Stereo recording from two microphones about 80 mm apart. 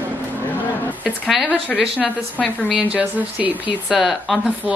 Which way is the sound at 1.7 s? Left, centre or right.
Centre.